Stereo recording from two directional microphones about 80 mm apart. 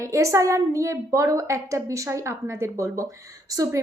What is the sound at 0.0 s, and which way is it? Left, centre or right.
A woman's voice, right.